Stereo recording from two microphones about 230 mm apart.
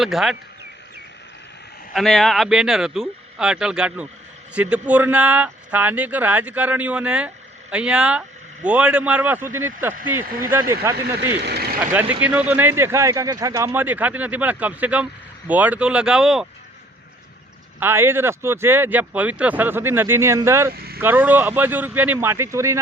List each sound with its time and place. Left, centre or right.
0.0 s speech: centre
1.9 s speech: centre
11.3 s vehicle: right
11.9 s speech: centre
17.7 s speech: centre